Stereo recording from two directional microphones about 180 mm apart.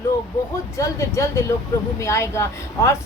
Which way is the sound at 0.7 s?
15° left (ahead or behind).